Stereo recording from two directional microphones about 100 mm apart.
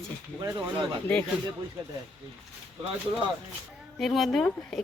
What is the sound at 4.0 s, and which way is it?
Speech, centre (ahead or behind).